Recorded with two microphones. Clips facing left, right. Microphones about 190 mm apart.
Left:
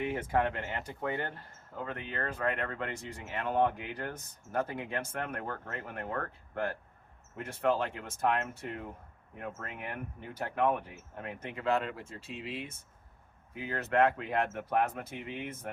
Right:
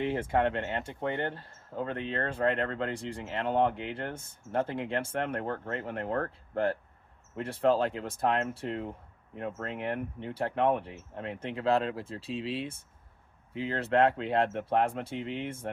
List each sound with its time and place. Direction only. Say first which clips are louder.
0.0 s speech: right 3 dB; 30° right (ahead or behind)